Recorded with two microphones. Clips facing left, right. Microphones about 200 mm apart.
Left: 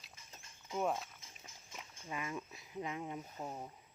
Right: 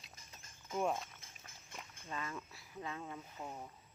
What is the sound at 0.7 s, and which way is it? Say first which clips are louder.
Speech: even; centre (ahead or behind).